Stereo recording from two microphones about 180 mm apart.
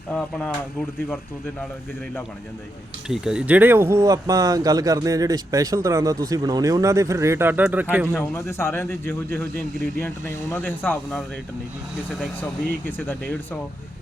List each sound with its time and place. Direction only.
0.1 s speech: 5° left (ahead or behind)
3.1 s speech: 5° right (ahead or behind)
8.1 s speech: 15° left (ahead or behind)